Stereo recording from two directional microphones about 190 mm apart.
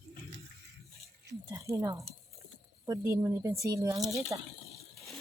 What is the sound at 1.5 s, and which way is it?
Speech, 15° right (ahead or behind).